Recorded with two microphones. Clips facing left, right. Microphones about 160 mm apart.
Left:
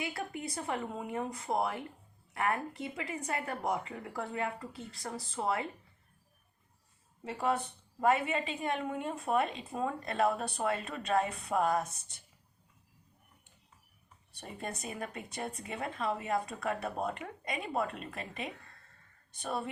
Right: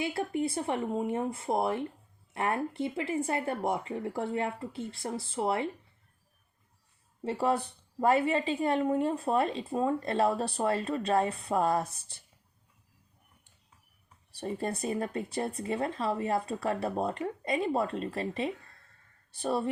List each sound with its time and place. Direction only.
0.0 s speech: 30° right (ahead or behind)
7.3 s a woman's voice: 35° right (ahead or behind)
14.3 s a woman's voice: 30° right (ahead or behind)